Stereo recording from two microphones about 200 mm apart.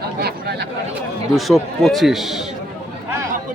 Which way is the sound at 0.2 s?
50° right (ahead or behind).